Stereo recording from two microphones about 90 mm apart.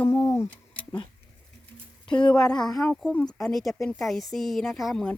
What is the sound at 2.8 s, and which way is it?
Speech, 15° left (ahead or behind).